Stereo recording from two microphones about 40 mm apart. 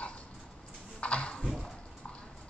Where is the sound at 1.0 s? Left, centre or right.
Left.